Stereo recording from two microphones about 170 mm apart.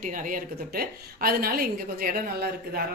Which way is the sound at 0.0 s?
50° right (ahead or behind).